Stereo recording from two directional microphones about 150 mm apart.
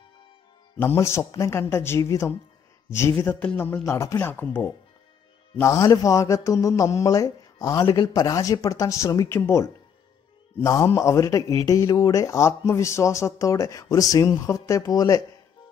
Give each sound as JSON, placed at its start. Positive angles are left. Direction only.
{"t": 0.7, "sound": "speech", "side_deg": 15}